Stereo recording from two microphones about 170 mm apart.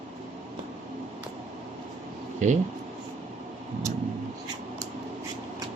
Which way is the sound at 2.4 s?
45° right (ahead or behind).